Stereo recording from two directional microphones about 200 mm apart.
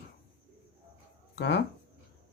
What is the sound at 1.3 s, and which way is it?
Speech, 60° left (ahead or behind).